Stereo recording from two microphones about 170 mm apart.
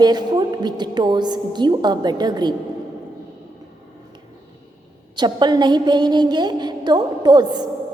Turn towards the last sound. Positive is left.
turn(degrees=-25)  # may be behind; listen again after turning